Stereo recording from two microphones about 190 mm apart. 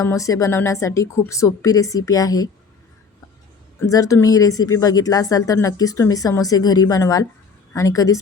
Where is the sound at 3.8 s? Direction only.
15° left (ahead or behind).